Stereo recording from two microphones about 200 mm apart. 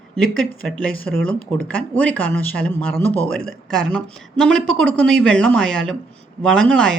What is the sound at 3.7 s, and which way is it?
Speech, 5° left (ahead or behind).